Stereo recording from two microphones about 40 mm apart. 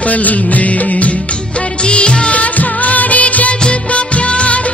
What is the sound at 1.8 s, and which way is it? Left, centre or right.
Music, left.